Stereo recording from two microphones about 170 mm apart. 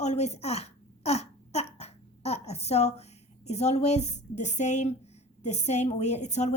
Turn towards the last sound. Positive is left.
turn(degrees=40)  # may be behind; listen again after turning